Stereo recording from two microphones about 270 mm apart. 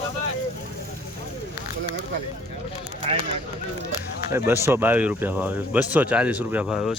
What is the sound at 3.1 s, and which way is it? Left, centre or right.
Speech, right.